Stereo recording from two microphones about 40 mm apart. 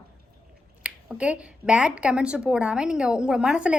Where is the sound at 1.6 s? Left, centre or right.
Right.